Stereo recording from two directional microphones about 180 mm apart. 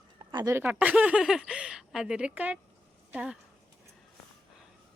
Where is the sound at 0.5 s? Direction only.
10° right (ahead or behind).